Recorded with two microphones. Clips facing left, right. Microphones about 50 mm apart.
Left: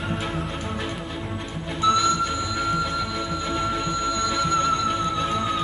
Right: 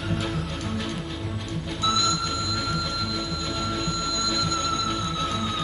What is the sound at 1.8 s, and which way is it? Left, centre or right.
Music, left.